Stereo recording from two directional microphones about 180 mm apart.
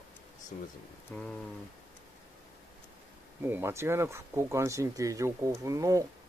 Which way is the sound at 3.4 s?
10° right (ahead or behind).